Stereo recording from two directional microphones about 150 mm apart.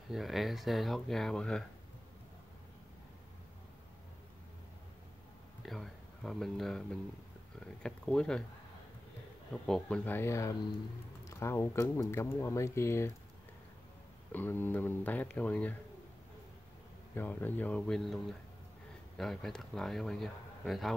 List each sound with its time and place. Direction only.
0.1 s speech: centre (ahead or behind)
5.6 s speech: centre (ahead or behind)
9.5 s speech: 5° left (ahead or behind)
14.3 s speech: 10° left (ahead or behind)
17.1 s speech: 15° left (ahead or behind)